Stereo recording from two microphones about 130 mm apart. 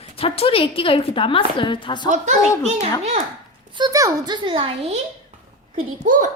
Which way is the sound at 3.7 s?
35° right (ahead or behind).